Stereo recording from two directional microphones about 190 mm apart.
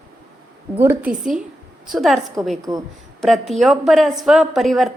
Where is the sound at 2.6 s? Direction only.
20° right (ahead or behind).